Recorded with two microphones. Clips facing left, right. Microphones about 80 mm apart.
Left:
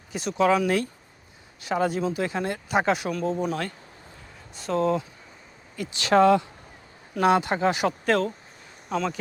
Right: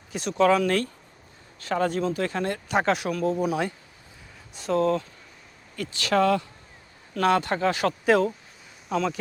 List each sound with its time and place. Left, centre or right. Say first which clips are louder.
0.1 s speech: right 1 dB; centre
6.0 s speech: left 4 dB; left
8.0 s speech: right 6 dB; centre